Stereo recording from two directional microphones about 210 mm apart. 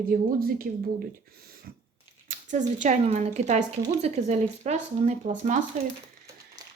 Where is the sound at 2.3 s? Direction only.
40° right (ahead or behind).